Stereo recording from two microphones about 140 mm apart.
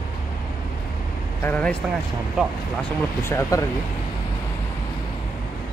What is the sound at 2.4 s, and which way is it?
Speech, 5° right (ahead or behind).